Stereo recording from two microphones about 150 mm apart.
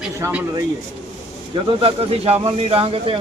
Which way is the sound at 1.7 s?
35° right (ahead or behind).